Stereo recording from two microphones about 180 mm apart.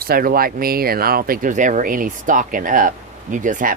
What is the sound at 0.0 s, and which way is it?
Speech, 55° right (ahead or behind).